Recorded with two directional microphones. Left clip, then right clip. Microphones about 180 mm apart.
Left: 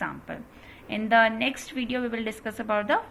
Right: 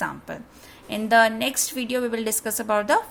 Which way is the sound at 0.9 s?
45° right (ahead or behind).